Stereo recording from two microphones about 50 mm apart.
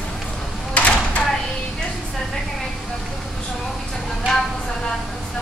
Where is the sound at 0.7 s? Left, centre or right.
Left.